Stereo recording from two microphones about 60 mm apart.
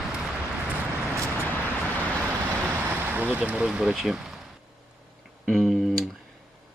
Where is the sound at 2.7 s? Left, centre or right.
Right; by 4.4 s centre.